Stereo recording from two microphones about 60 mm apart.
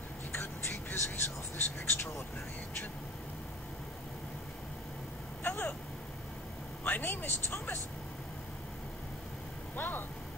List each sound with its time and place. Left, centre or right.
0.3 s whispering: left
1.9 s vehicle: left
5.4 s vehicle: left
6.8 s speech: left
9.8 s vehicle: left